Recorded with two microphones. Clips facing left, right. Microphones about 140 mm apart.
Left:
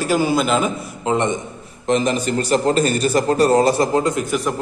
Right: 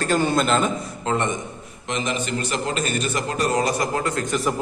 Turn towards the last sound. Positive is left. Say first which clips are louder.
# left 3 dB
turn(degrees=5)  # may be behind; listen again after turning